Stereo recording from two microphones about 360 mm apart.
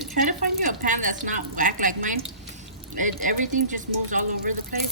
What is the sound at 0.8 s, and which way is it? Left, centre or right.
Speech, right.